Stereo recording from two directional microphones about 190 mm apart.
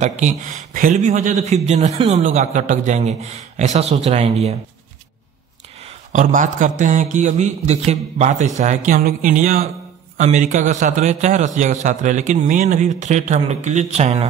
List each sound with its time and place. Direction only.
0.0 s a man's voice: 40° right (ahead or behind)
6.1 s a man's voice: 40° right (ahead or behind)